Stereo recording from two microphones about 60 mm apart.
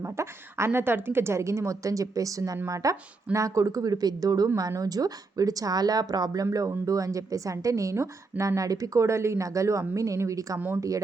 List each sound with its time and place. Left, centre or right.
0.0 s a woman's voice: right
3.3 s speech: right
6.7 s a woman's voice: right